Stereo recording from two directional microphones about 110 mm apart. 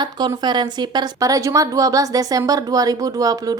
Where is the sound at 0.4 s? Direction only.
40° right (ahead or behind).